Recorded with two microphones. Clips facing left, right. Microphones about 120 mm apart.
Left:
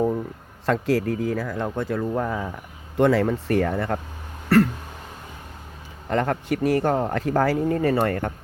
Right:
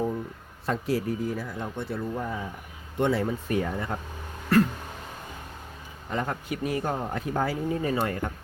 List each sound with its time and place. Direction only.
0.6 s speech: 90° left; by 3.9 s 65° left (ahead or behind)
4.4 s a sound: 65° left (ahead or behind)
6.1 s speech: 65° left (ahead or behind)